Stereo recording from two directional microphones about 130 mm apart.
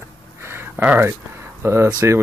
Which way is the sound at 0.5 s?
15° right (ahead or behind).